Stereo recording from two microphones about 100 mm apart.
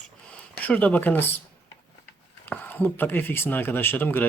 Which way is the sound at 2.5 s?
20° left (ahead or behind).